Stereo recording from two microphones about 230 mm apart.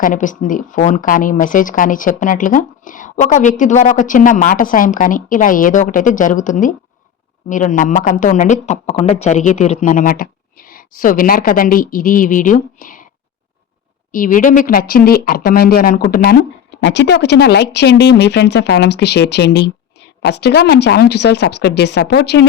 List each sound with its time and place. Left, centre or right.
0.0 s speech: left
14.1 s speech: left